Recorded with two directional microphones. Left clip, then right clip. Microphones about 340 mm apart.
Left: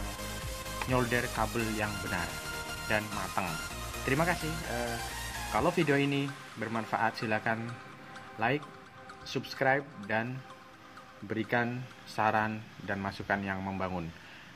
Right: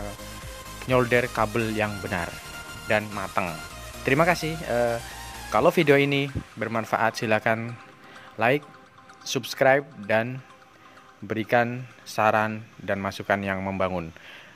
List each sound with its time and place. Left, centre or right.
0.8 s speech: right